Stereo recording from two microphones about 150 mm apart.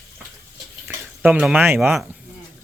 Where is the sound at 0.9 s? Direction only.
10° right (ahead or behind).